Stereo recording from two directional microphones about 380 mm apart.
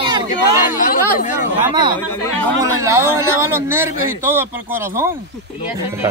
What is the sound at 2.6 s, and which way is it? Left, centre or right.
A man's voice, centre.